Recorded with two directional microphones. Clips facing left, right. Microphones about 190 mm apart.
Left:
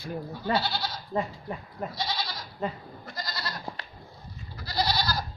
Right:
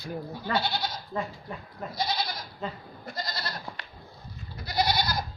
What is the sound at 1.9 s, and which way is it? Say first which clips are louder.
Goat: right 6 dB; 25° right (ahead or behind).